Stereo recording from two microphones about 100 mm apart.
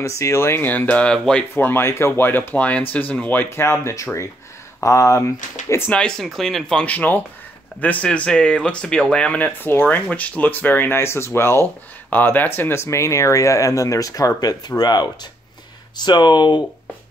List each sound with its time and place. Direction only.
0.1 s speech: 30° left (ahead or behind); by 1.4 s 10° left (ahead or behind)
1.5 s speech: 25° left (ahead or behind)
5.9 s speech: 10° left (ahead or behind); by 16.6 s 50° left (ahead or behind)